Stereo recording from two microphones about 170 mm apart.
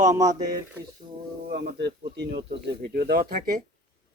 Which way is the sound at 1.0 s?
35° right (ahead or behind).